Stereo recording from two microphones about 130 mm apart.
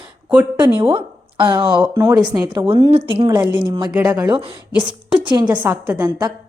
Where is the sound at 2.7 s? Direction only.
45° right (ahead or behind).